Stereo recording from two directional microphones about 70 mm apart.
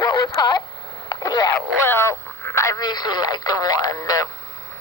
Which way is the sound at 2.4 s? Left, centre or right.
Left.